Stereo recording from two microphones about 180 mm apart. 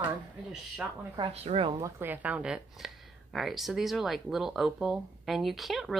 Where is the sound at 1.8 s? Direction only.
15° right (ahead or behind).